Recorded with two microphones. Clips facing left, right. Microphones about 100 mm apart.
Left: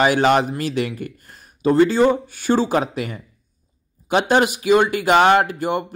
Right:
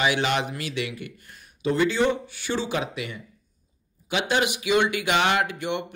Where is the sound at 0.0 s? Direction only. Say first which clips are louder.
Left 8 dB; 45° left (ahead or behind).